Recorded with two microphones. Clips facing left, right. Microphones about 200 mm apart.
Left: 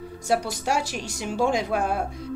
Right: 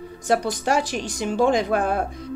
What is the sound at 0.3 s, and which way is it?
A woman's voice, 10° left (ahead or behind).